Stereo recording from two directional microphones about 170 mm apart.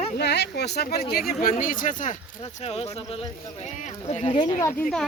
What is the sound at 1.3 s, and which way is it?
Speech, 55° left (ahead or behind).